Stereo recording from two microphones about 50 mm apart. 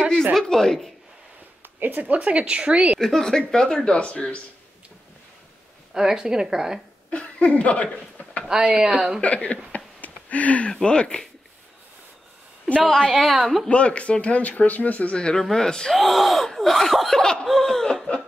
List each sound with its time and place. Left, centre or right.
0.3 s speech: centre
1.8 s speech: right
2.1 s a woman's voice: right
3.0 s speech: centre
5.9 s a woman's voice: centre
7.1 s speech: left
8.5 s a woman's voice: centre
9.2 s speech: left
9.9 s a sound: left
10.7 s speech: centre
12.8 s speech: centre
13.7 s speech: left
15.1 s speech: centre
15.9 s speech: centre